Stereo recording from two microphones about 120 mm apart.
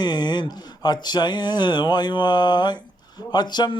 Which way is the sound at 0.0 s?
35° left (ahead or behind).